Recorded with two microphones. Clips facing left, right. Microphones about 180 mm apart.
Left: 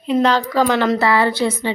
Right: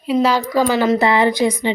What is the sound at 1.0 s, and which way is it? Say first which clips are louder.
Speech: right 2 dB; 20° right (ahead or behind).